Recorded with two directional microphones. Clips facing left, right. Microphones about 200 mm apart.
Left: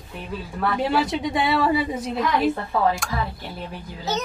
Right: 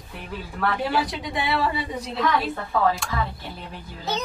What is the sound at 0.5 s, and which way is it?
A woman's voice, 25° left (ahead or behind).